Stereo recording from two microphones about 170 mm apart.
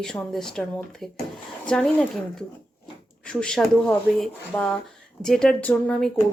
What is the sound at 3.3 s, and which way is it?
Speech, 5° left (ahead or behind).